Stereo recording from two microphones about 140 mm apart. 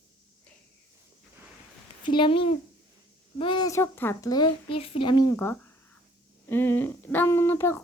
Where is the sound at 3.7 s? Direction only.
15° left (ahead or behind).